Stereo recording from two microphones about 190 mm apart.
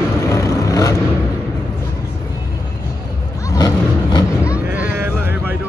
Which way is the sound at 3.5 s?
20° left (ahead or behind).